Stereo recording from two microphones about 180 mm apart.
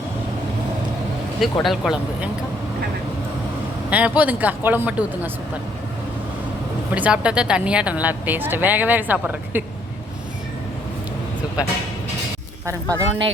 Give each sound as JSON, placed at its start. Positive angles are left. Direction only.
{"t": 1.4, "sound": "speech", "side_deg": 0}
{"t": 3.8, "sound": "speech", "side_deg": -5}
{"t": 6.9, "sound": "speech", "side_deg": -5}
{"t": 12.6, "sound": "speech", "side_deg": -15}